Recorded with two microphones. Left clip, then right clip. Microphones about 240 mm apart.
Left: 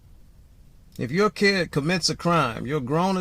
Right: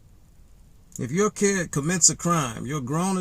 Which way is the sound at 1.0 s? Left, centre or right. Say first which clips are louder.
Left 2 dB; right.